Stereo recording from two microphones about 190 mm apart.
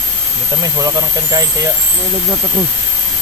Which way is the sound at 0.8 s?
20° right (ahead or behind).